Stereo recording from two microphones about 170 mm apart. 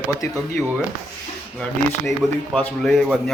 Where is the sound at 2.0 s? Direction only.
Centre (ahead or behind).